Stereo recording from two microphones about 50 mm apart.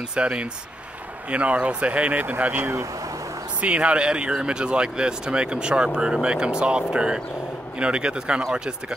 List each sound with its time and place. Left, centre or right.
0.1 s speech: right
3.6 s speech: right